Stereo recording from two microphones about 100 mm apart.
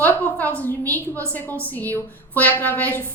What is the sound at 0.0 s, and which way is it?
A woman's voice, 15° left (ahead or behind).